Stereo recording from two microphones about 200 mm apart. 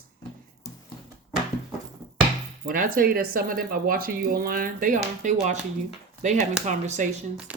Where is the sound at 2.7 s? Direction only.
45° right (ahead or behind).